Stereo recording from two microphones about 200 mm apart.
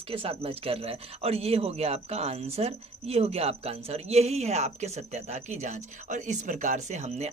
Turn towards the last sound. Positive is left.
turn(degrees=-35)  # may be behind; listen again after turning